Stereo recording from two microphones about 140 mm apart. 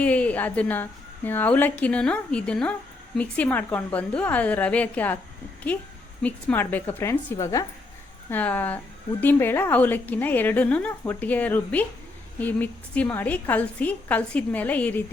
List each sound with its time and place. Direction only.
0.0 s a woman's voice: 10° left (ahead or behind)